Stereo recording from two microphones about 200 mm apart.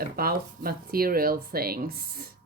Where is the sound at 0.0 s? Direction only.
50° right (ahead or behind).